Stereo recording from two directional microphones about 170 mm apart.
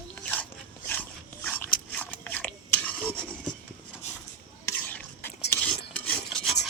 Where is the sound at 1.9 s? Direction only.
10° left (ahead or behind).